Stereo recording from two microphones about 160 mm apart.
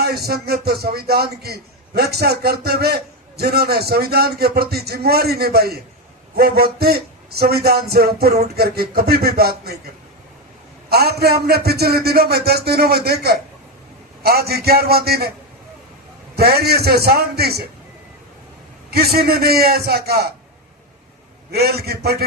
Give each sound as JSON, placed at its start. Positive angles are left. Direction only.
{"t": 0.0, "sound": "speech", "side_deg": -75}
{"t": 10.8, "sound": "a man's voice", "side_deg": -80}
{"t": 16.3, "sound": "a man's voice", "side_deg": -80}
{"t": 18.9, "sound": "speech", "side_deg": -80}
{"t": 21.5, "sound": "a man's voice", "side_deg": -85}